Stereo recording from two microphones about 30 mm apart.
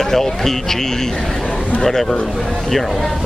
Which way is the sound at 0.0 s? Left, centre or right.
Centre.